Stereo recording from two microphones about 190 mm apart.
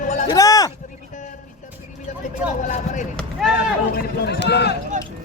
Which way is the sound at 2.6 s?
40° left (ahead or behind).